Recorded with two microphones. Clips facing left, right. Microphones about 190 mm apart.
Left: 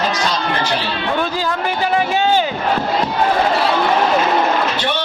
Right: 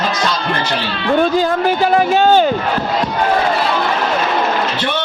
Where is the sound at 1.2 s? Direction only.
50° right (ahead or behind).